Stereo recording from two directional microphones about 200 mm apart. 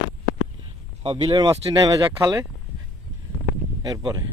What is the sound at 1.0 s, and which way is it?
Speech, 20° right (ahead or behind).